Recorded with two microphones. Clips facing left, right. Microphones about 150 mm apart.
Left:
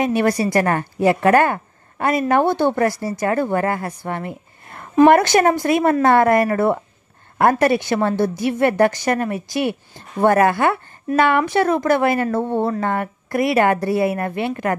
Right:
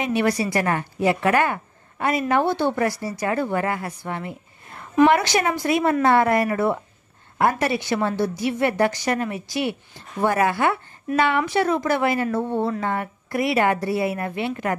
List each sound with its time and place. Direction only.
0.0 s a woman's voice: 45° left (ahead or behind)